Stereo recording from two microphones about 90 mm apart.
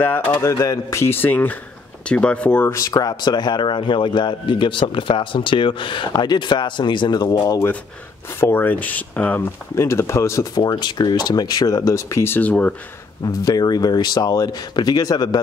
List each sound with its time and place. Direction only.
0.0 s speech: 20° left (ahead or behind)
0.5 s speech: 35° left (ahead or behind); by 2.7 s 15° left (ahead or behind)
2.7 s speech: 40° left (ahead or behind)
8.4 s speech: 25° left (ahead or behind)
9.8 s speech: 30° left (ahead or behind)
10.5 s speech: 50° left (ahead or behind); by 12.7 s 15° left (ahead or behind)
13.2 s speech: 45° left (ahead or behind)